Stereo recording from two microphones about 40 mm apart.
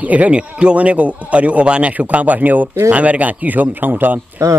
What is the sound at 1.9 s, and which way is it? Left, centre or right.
Speech, right.